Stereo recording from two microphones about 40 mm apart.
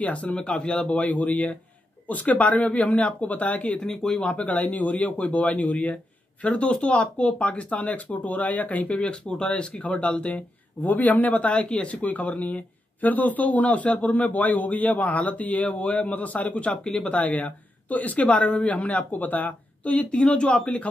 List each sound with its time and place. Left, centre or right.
0.0 s speech: left
0.9 s speech: left
3.7 s speech: centre
4.3 s speech: left
11.3 s speech: left
16.8 s speech: centre
17.1 s speech: left
19.8 s speech: left